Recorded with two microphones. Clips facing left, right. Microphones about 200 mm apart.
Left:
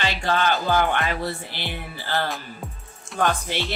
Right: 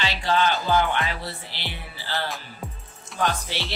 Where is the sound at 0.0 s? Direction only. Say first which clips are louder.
Even; 50° left (ahead or behind).